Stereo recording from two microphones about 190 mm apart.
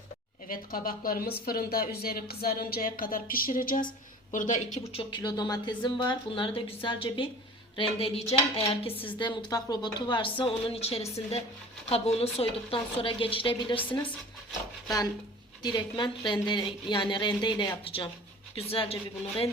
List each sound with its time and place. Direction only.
0.4 s a woman's voice: 50° left (ahead or behind); by 7.3 s 25° left (ahead or behind)
7.8 s dishes: 30° left (ahead or behind)
8.9 s a woman's voice: 10° left (ahead or behind)
9.1 s a woman's voice: 25° left (ahead or behind)
15.6 s a woman's voice: 20° left (ahead or behind)